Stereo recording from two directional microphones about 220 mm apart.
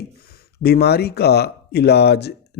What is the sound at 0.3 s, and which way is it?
Speech, 45° left (ahead or behind).